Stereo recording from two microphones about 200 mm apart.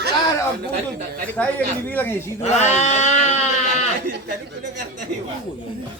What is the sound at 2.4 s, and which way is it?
Speech, 35° left (ahead or behind).